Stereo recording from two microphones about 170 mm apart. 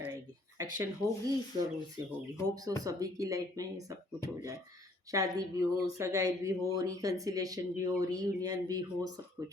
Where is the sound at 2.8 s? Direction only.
20° right (ahead or behind).